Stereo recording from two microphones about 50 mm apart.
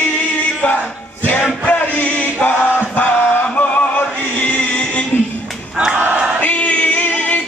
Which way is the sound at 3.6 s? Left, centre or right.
Left.